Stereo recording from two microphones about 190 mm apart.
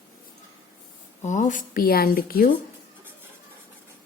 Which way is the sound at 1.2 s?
40° left (ahead or behind).